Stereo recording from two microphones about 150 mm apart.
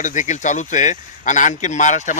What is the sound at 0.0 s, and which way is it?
Speech, 55° left (ahead or behind).